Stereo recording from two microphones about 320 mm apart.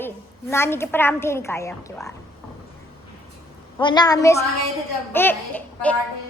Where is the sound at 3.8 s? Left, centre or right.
Centre.